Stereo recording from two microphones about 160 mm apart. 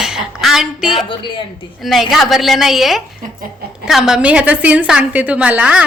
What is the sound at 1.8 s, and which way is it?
A woman's voice, centre (ahead or behind).